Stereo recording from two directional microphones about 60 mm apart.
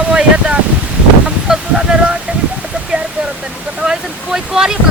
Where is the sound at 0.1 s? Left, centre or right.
Centre.